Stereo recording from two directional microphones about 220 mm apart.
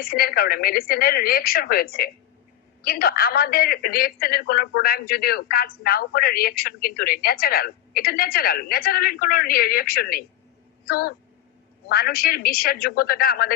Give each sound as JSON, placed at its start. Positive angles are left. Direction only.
{"t": 0.0, "sound": "speech", "side_deg": 40}